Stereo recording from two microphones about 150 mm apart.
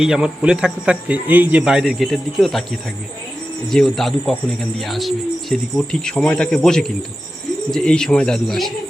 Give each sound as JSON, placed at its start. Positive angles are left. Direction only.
{"t": 0.0, "sound": "a man's voice", "side_deg": -5}
{"t": 3.7, "sound": "a man's voice", "side_deg": 0}